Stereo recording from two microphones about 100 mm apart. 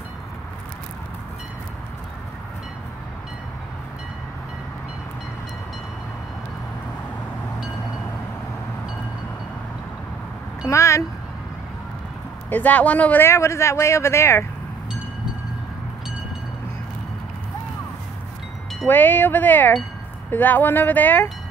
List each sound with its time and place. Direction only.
10.7 s speech: 30° left (ahead or behind)
12.4 s speech: 15° left (ahead or behind)
18.9 s speech: 20° left (ahead or behind)